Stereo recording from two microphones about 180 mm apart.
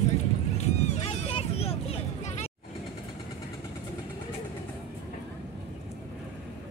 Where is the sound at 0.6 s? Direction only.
40° left (ahead or behind).